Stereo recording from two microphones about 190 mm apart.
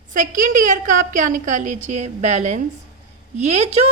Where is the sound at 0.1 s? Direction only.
45° right (ahead or behind).